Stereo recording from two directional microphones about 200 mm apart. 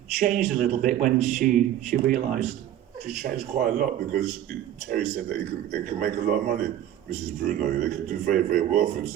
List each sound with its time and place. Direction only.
0.2 s a man's voice: 40° right (ahead or behind)